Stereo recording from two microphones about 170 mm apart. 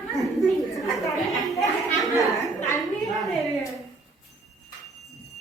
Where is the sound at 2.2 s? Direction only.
20° left (ahead or behind).